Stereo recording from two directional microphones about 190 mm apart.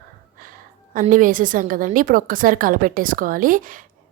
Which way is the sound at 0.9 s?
45° right (ahead or behind).